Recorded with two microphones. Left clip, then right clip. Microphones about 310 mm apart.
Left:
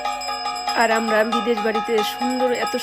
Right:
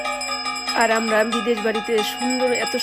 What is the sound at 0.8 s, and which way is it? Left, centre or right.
Speech, centre.